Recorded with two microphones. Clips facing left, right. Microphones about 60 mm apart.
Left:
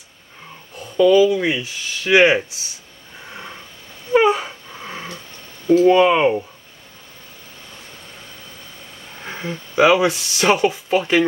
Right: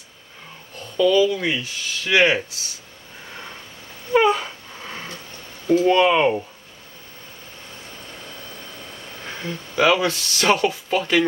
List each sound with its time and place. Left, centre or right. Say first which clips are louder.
0.7 s speech: left 4 dB; centre
3.3 s sniff: left 2 dB; centre
4.1 s a sound: left 2 dB; centre
5.9 s speech: left 2 dB; centre
9.2 s speech: left 3 dB; centre